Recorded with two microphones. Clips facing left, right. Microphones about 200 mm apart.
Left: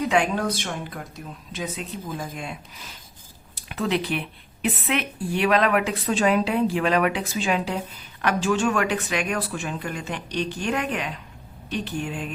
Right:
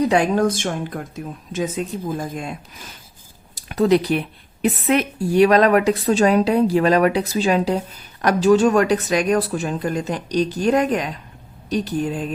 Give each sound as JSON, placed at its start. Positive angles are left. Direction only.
{"t": 0.0, "sound": "a woman's voice", "side_deg": -40}